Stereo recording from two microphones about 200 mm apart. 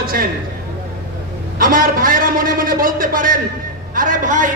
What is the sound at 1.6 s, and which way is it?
A man's voice, 45° right (ahead or behind).